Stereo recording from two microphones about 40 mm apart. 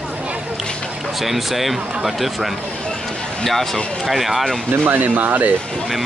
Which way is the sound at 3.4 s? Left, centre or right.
Centre.